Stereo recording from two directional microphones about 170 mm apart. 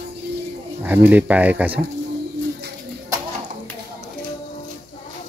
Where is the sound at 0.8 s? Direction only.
10° right (ahead or behind).